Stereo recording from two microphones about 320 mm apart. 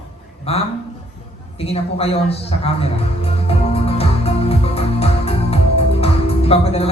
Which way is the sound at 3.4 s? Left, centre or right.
Centre.